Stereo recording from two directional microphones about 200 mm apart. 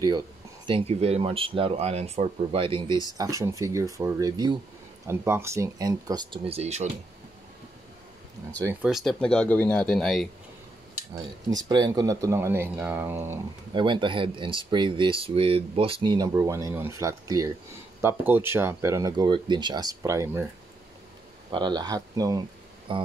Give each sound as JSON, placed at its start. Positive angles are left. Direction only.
{"t": 0.7, "sound": "speech", "side_deg": -30}
{"t": 2.9, "sound": "speech", "side_deg": 20}
{"t": 3.2, "sound": "speech", "side_deg": -15}
{"t": 8.8, "sound": "speech", "side_deg": 0}
{"t": 11.5, "sound": "speech", "side_deg": -20}
{"t": 13.7, "sound": "speech", "side_deg": -25}
{"t": 21.5, "sound": "speech", "side_deg": -20}